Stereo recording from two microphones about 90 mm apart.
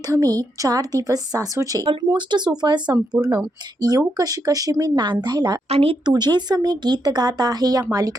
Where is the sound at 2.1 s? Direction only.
55° right (ahead or behind).